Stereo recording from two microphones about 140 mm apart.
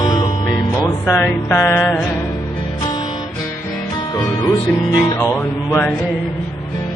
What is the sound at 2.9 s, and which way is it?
Music, 30° left (ahead or behind).